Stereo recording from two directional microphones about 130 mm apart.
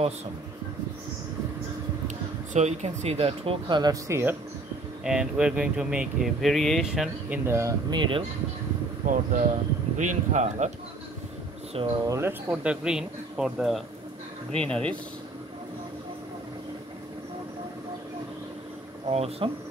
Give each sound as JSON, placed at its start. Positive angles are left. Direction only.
{"t": 2.5, "sound": "speech", "side_deg": -60}
{"t": 5.0, "sound": "speech", "side_deg": -5}
{"t": 7.4, "sound": "speech", "side_deg": -20}
{"t": 7.9, "sound": "speech", "side_deg": -40}
{"t": 9.0, "sound": "speech", "side_deg": -90}
{"t": 9.9, "sound": "speech", "side_deg": -65}
{"t": 11.8, "sound": "speech", "side_deg": -45}
{"t": 12.1, "sound": "speech", "side_deg": -20}
{"t": 12.4, "sound": "speech", "side_deg": -5}
{"t": 14.5, "sound": "speech", "side_deg": 10}
{"t": 19.0, "sound": "speech", "side_deg": -50}